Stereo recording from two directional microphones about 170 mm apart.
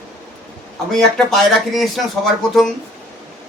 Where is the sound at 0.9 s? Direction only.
5° left (ahead or behind).